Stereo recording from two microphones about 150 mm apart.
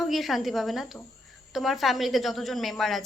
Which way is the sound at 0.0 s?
Centre (ahead or behind).